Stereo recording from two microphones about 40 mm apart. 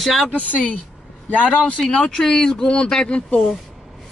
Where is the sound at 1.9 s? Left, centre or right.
Centre.